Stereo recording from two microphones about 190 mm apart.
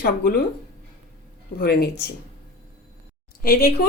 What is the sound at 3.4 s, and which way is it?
Speech, 55° left (ahead or behind).